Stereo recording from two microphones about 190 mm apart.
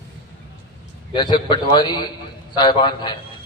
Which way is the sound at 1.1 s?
25° left (ahead or behind).